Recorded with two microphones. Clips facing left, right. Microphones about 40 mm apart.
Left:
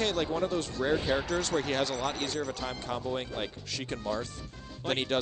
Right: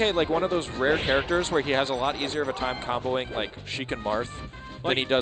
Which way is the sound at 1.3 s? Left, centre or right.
Right.